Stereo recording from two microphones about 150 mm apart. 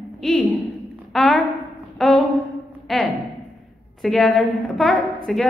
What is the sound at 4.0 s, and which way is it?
A woman's voice, centre (ahead or behind).